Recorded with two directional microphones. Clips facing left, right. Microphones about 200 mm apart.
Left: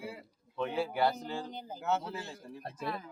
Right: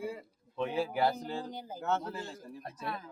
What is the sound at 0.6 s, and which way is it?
Speech, 10° right (ahead or behind).